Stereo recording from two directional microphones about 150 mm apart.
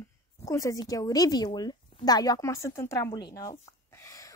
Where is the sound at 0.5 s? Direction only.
20° left (ahead or behind).